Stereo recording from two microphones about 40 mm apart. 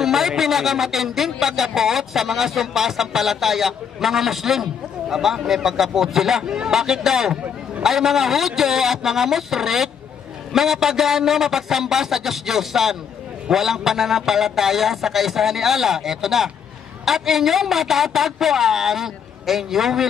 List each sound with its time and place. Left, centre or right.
0.0 s a sound: centre
0.4 s speech: centre
6.4 s speech: centre
6.7 s speech: centre